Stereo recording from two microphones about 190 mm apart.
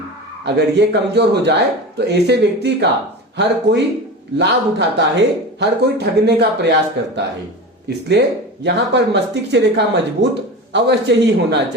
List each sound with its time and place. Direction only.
0.4 s speech: 60° right (ahead or behind)
7.9 s speech: 60° right (ahead or behind)